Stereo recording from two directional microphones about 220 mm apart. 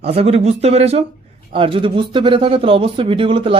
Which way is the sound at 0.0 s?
25° right (ahead or behind).